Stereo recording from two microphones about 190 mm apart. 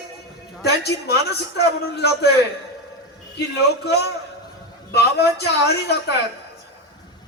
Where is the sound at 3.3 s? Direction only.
60° left (ahead or behind).